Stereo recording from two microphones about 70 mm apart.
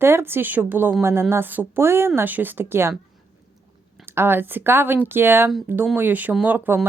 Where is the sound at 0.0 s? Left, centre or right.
Right.